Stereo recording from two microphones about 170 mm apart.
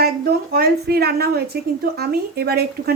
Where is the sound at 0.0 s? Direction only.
65° right (ahead or behind).